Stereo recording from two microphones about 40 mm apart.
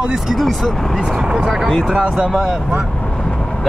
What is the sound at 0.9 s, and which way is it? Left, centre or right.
Speech, centre.